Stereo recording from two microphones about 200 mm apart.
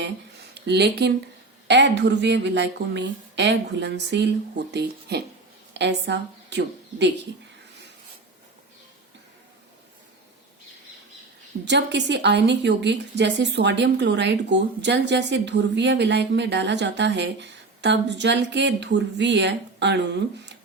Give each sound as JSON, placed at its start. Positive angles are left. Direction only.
{"t": 0.6, "sound": "a woman's voice", "side_deg": -60}
{"t": 11.6, "sound": "a woman's voice", "side_deg": -60}